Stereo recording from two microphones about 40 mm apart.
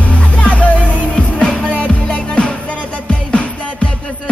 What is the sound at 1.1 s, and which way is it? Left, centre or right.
Music, left.